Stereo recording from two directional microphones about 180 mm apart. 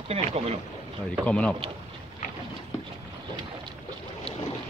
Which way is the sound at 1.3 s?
5° left (ahead or behind).